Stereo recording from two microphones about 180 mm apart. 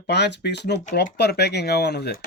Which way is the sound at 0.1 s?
70° left (ahead or behind).